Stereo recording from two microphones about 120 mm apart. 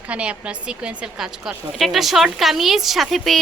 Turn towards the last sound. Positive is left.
turn(degrees=0)  # may be behind; listen again after turning